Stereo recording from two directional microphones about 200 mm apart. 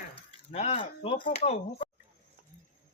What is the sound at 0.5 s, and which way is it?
Speech, 30° left (ahead or behind).